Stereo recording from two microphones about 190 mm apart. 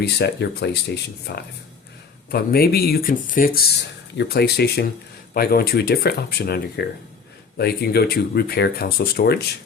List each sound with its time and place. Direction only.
0.0 s speech: 60° left (ahead or behind)